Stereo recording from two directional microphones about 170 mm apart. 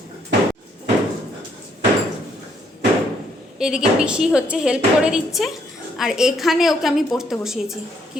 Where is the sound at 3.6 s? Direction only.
5° right (ahead or behind).